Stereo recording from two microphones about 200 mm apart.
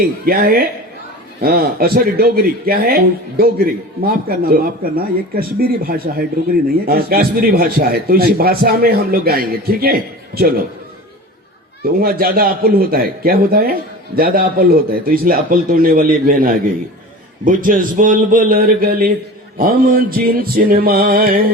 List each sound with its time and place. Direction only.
0.3 s a man's voice: 50° right (ahead or behind)
11.8 s a man's voice: 50° right (ahead or behind)